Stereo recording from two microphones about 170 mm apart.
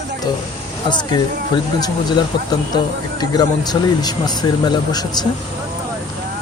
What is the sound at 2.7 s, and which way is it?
Speech, 25° left (ahead or behind).